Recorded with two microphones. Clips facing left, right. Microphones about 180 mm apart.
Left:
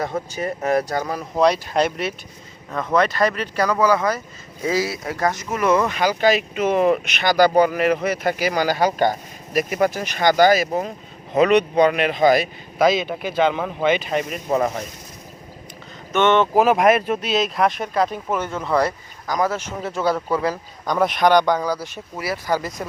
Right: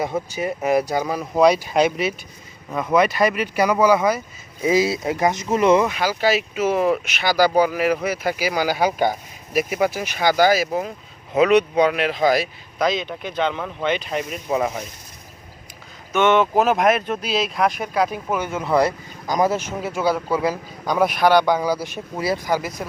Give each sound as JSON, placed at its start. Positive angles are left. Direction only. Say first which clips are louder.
{"t": 0.0, "sound": "a man's voice", "louder": "right 1 dB", "side_deg": -10}
{"t": 5.8, "sound": "speech", "louder": "left 2 dB", "side_deg": -5}
{"t": 16.1, "sound": "a man's voice", "louder": "even", "side_deg": 0}